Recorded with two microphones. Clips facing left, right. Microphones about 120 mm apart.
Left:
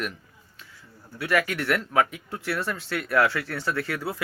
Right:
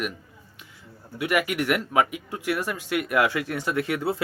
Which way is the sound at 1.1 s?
15° right (ahead or behind).